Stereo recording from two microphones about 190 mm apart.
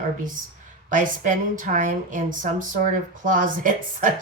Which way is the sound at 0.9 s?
45° right (ahead or behind).